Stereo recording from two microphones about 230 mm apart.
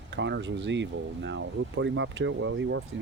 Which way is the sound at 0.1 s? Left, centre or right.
Right.